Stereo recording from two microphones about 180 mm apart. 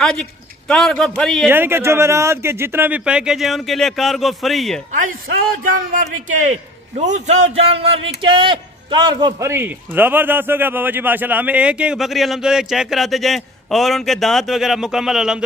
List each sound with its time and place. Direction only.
0.0 s a man's voice: 5° left (ahead or behind)
1.5 s a man's voice: 10° right (ahead or behind)
5.7 s a man's voice: 45° right (ahead or behind); by 15.3 s centre (ahead or behind)